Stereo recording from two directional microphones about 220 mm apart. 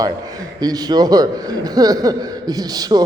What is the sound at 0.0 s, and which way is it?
A man's voice, 15° right (ahead or behind).